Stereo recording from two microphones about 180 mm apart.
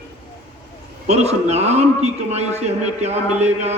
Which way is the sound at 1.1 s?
35° right (ahead or behind).